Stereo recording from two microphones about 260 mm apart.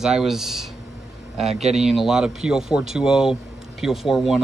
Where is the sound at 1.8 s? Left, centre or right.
Centre.